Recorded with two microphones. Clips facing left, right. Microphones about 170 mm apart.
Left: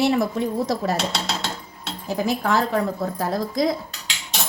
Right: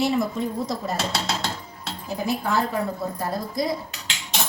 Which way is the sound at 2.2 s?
90° left.